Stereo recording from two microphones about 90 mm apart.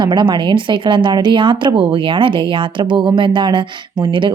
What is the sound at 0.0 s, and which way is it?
Speech, 60° right (ahead or behind).